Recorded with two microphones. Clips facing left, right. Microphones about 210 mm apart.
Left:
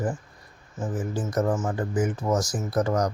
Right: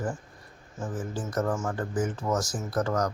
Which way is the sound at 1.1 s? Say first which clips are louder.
Left 4 dB; 15° left (ahead or behind).